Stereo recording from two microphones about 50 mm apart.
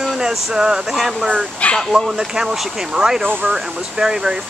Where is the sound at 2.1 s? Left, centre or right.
Centre.